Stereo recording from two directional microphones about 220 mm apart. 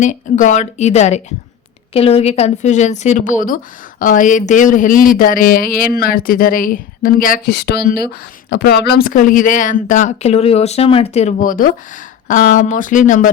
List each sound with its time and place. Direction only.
0.0 s speech: 35° left (ahead or behind)